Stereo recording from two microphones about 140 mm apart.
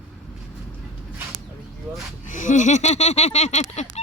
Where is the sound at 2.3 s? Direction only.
65° left (ahead or behind).